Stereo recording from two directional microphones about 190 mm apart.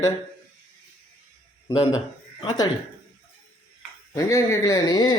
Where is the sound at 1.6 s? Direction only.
20° left (ahead or behind).